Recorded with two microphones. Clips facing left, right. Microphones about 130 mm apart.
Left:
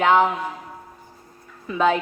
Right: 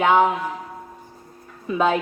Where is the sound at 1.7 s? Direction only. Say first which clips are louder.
Even; 15° right (ahead or behind).